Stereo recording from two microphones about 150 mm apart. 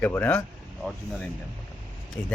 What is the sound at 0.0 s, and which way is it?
Speech, 10° left (ahead or behind).